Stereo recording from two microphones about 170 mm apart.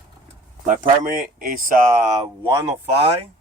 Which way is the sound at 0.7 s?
55° right (ahead or behind).